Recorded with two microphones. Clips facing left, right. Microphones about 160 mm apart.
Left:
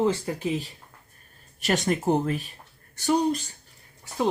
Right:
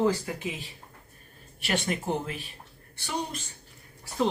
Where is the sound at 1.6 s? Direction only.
40° left (ahead or behind).